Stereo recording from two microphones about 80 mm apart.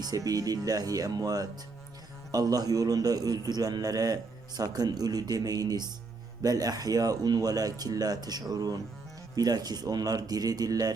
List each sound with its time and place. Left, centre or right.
0.0 s a man's voice: right